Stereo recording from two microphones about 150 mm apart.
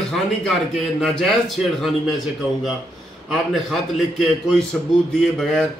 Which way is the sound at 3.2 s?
Centre (ahead or behind).